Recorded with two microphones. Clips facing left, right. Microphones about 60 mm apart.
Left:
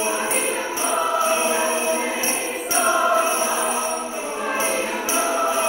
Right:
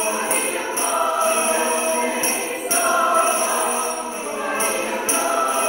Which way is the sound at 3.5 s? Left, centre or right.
Centre.